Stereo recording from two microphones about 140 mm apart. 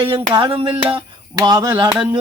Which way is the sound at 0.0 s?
40° right (ahead or behind).